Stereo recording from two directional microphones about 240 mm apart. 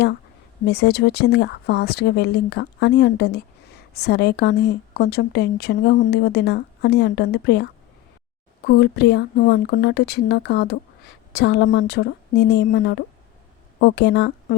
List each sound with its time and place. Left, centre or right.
0.6 s speech: left